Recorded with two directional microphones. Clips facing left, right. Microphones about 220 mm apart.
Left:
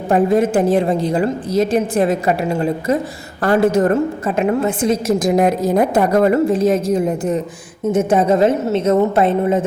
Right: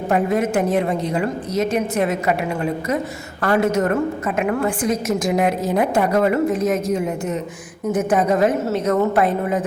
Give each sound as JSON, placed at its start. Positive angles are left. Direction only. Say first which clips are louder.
{"t": 0.1, "sound": "a woman's voice", "louder": "left 5 dB", "side_deg": 30}